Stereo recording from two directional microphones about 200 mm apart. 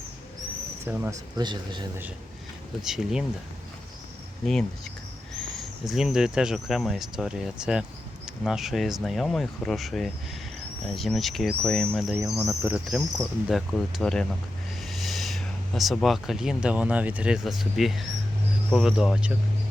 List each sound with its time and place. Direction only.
0.9 s speech: 10° right (ahead or behind)
1.4 s speech: 20° right (ahead or behind)
2.8 s speech: centre (ahead or behind)
5.9 s speech: 5° right (ahead or behind)
12.1 s speech: 15° right (ahead or behind)
12.5 s speech: 5° right (ahead or behind)